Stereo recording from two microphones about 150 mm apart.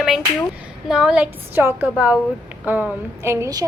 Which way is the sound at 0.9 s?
5° right (ahead or behind).